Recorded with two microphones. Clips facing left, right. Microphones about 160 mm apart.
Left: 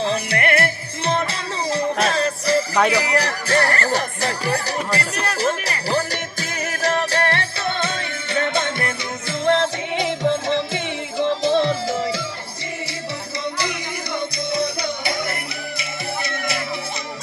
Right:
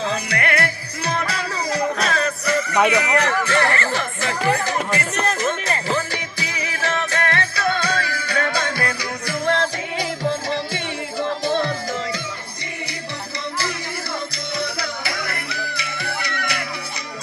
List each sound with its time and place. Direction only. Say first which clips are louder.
0.0 s music: left 2 dB; 25° left (ahead or behind)
2.9 s speech: right 1 dB; 35° left (ahead or behind)
3.4 s music: left 1 dB; 40° left (ahead or behind)
5.4 s speech: left 1 dB; 35° left (ahead or behind)
5.9 s music: left 1 dB; 40° left (ahead or behind)
11.2 s music: left 4 dB; 20° left (ahead or behind)
14.5 s music: left 3 dB; 20° left (ahead or behind)